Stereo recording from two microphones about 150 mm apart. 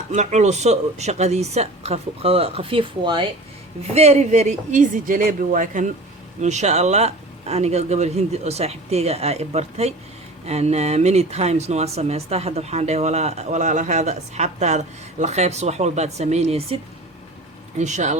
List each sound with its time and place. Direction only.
0.1 s speech: 50° right (ahead or behind); by 3.2 s 30° right (ahead or behind)
3.9 s speech: 45° right (ahead or behind)
17.7 s speech: 50° right (ahead or behind)